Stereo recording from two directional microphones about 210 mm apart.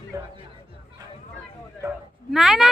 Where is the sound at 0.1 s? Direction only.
15° right (ahead or behind).